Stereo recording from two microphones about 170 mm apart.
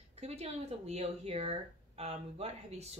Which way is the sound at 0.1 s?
40° right (ahead or behind).